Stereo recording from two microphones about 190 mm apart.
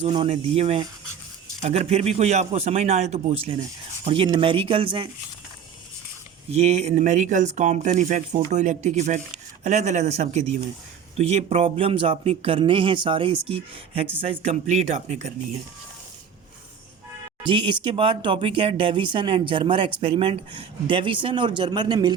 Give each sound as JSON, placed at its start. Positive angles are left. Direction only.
{"t": 0.0, "sound": "speech", "side_deg": -30}
{"t": 6.5, "sound": "speech", "side_deg": -35}
{"t": 17.4, "sound": "speech", "side_deg": -25}